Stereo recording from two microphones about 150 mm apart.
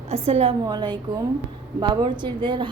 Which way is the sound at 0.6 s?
30° right (ahead or behind).